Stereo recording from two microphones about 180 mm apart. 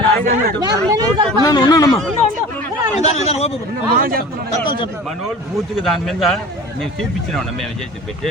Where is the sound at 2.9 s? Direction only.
35° left (ahead or behind).